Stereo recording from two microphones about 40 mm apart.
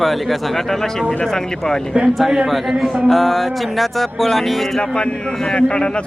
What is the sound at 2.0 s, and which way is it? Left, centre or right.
Speech, right.